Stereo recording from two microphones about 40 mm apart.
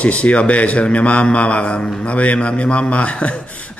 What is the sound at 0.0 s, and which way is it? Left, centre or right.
A man's voice, left.